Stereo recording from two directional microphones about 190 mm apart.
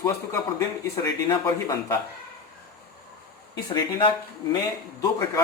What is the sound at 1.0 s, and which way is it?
Speech, 20° left (ahead or behind).